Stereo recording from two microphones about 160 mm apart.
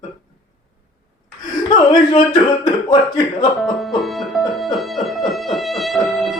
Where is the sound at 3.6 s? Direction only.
Centre (ahead or behind).